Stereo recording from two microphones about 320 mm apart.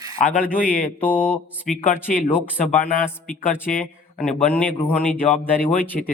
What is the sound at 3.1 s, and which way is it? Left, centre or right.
Speech, centre.